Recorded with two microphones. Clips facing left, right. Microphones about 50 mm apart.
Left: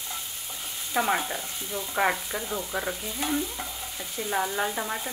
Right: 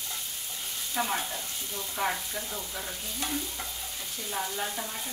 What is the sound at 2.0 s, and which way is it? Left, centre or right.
Speech, left.